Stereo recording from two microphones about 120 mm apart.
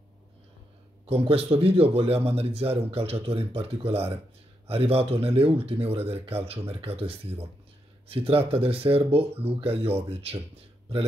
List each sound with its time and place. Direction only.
1.0 s a man's voice: 55° right (ahead or behind)